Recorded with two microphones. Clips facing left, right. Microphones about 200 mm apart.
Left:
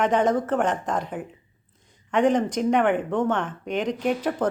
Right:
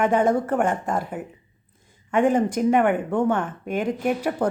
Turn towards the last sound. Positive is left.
turn(degrees=-10)  # may be behind; listen again after turning